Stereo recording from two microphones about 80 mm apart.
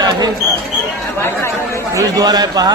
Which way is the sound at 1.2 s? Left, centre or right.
Left.